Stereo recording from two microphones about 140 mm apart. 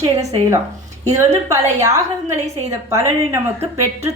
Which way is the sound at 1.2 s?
20° right (ahead or behind).